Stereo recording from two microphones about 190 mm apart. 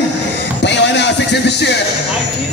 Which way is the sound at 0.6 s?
65° left (ahead or behind).